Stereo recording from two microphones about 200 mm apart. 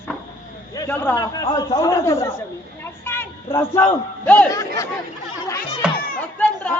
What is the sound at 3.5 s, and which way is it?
A man's voice, 10° left (ahead or behind).